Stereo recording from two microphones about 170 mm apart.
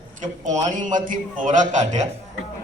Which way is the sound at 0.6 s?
50° right (ahead or behind).